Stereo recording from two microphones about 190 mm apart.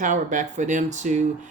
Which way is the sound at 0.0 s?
40° right (ahead or behind).